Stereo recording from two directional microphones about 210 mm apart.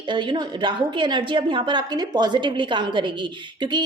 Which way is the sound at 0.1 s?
20° right (ahead or behind).